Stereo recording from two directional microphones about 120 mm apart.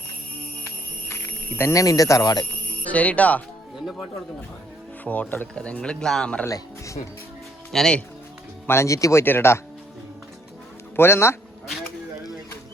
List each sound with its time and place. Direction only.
0.6 s music: 20° left (ahead or behind)
2.8 s speech: 10° left (ahead or behind)
5.0 s speech: 15° left (ahead or behind)
6.5 s speech: 25° left (ahead or behind)
7.7 s speech: 5° left (ahead or behind)
8.6 s speech: 20° left (ahead or behind)
10.9 s speech: 20° left (ahead or behind)